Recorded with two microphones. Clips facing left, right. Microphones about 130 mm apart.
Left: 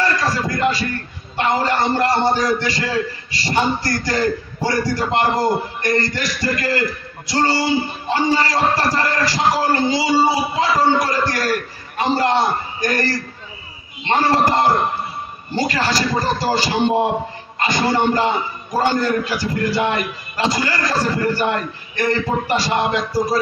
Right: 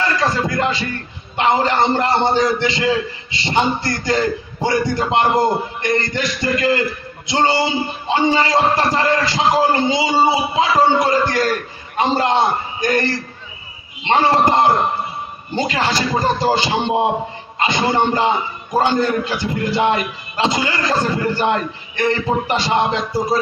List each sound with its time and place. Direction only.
0.3 s a sound: 20° right (ahead or behind)
1.3 s a man's voice: 20° right (ahead or behind)
14.0 s a man's voice: 20° right (ahead or behind)